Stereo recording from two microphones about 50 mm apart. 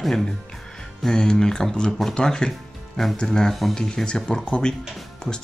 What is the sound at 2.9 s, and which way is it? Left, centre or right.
Speech, centre.